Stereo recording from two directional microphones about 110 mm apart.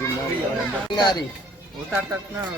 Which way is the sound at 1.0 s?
40° left (ahead or behind).